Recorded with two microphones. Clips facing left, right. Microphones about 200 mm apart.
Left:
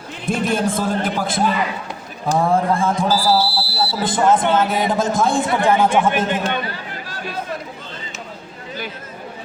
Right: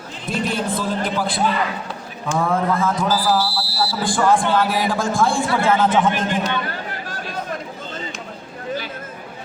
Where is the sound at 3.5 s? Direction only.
65° left (ahead or behind).